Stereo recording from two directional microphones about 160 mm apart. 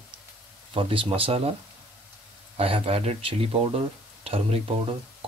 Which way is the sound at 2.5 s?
35° right (ahead or behind).